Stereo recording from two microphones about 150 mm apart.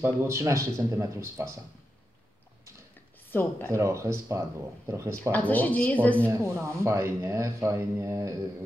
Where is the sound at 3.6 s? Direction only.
20° right (ahead or behind).